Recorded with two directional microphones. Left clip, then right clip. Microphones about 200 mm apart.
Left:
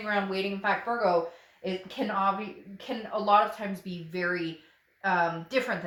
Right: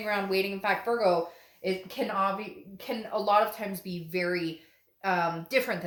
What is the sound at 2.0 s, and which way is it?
A woman's voice, 30° right (ahead or behind).